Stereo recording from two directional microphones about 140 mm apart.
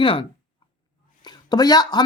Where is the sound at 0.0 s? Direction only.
40° left (ahead or behind).